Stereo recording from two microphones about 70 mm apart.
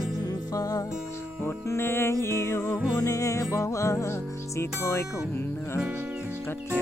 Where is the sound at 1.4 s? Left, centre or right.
Left.